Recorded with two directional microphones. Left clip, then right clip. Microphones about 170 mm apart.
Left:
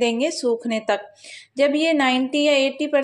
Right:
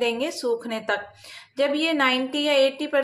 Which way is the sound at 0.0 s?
20° left (ahead or behind).